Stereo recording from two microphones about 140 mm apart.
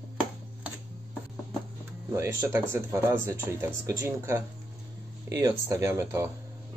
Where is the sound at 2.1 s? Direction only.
20° right (ahead or behind).